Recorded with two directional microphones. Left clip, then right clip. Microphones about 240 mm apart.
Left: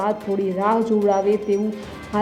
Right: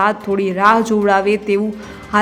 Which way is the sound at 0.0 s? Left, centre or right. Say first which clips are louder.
Right 6 dB; centre.